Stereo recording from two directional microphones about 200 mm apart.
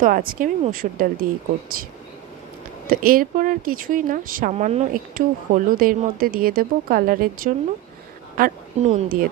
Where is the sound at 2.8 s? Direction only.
45° right (ahead or behind).